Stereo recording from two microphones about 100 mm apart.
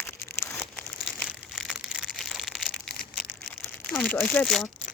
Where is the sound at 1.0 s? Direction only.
Centre (ahead or behind).